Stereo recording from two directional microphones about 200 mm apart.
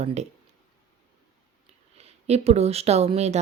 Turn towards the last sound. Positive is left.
turn(degrees=-30)  # may be behind; listen again after turning